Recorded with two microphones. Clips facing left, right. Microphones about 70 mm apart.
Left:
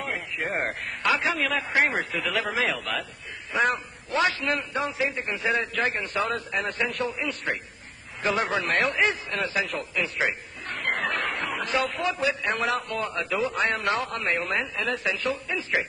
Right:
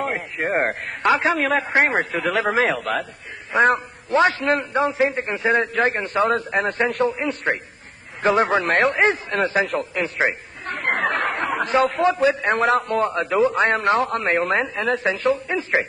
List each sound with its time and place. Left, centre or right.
0.0 s a man's voice: right